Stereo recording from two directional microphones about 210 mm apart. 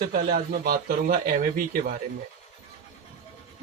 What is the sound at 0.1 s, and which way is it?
Speech, 40° right (ahead or behind).